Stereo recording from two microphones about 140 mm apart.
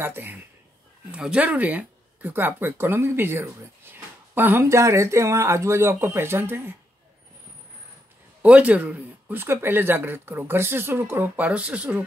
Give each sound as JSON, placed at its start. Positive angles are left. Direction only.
{"t": 0.0, "sound": "speech", "side_deg": -15}
{"t": 8.4, "sound": "speech", "side_deg": -10}